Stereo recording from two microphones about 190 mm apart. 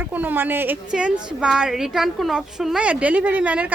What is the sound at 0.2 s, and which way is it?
A woman's voice, 10° right (ahead or behind).